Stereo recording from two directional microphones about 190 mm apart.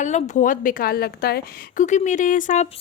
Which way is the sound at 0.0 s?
40° left (ahead or behind).